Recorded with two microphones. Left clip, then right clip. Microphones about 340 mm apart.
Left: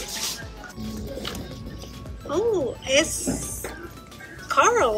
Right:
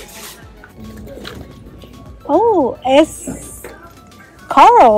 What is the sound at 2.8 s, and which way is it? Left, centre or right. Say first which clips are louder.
Speech: right 8 dB; centre.